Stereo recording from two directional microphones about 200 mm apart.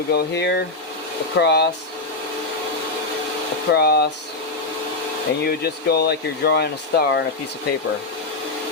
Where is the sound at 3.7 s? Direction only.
55° left (ahead or behind).